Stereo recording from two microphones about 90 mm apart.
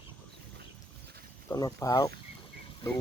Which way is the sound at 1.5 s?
45° left (ahead or behind).